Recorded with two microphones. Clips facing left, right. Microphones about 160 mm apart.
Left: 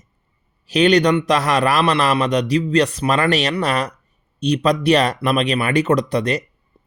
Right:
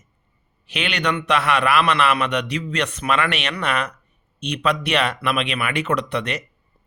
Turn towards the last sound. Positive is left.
turn(degrees=35)  # may be behind; listen again after turning